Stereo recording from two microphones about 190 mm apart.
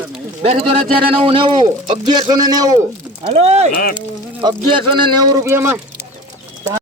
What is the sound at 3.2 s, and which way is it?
Speech, 35° right (ahead or behind).